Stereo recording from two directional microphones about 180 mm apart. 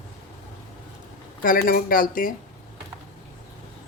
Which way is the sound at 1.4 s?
50° left (ahead or behind).